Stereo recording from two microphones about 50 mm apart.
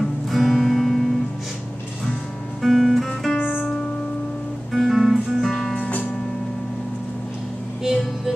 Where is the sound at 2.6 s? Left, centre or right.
Centre.